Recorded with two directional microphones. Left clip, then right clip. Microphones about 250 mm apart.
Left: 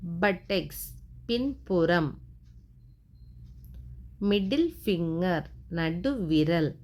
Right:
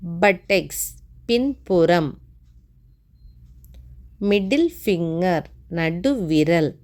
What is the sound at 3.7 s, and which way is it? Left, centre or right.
A woman's voice, right.